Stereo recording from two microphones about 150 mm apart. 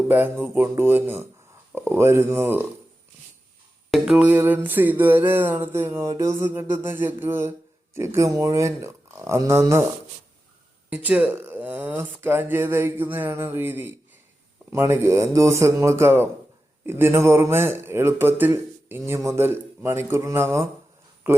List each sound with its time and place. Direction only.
0.1 s speech: 15° right (ahead or behind)
3.9 s speech: 5° right (ahead or behind)
10.8 s speech: 10° right (ahead or behind)